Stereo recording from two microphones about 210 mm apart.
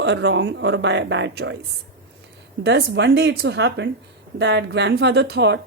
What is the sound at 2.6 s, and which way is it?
A woman's voice, 55° right (ahead or behind).